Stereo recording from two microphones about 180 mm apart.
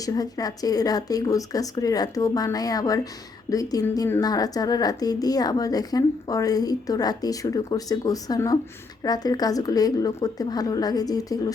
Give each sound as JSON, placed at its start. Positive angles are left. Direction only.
{"t": 0.0, "sound": "a woman's voice", "side_deg": 20}